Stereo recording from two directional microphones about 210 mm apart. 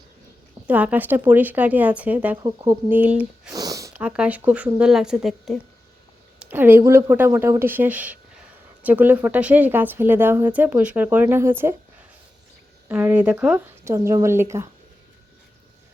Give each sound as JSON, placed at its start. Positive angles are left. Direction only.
{"t": 0.7, "sound": "speech", "side_deg": -5}
{"t": 2.4, "sound": "speech", "side_deg": -20}
{"t": 2.9, "sound": "speech", "side_deg": -5}
{"t": 3.5, "sound": "speech", "side_deg": -15}
{"t": 12.9, "sound": "speech", "side_deg": -10}